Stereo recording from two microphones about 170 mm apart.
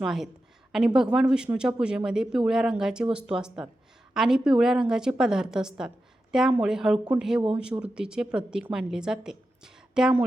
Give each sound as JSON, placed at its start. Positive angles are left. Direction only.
{"t": 0.0, "sound": "a woman's voice", "side_deg": 0}